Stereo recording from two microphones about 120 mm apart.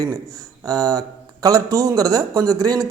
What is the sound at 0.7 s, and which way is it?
Speech, 30° right (ahead or behind).